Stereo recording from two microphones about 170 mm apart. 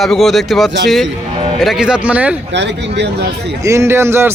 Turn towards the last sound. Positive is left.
turn(degrees=-15)  # may be behind; listen again after turning